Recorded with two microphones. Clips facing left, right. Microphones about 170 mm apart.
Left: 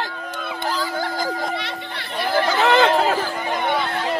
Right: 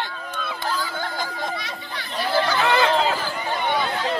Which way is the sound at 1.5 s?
65° left (ahead or behind).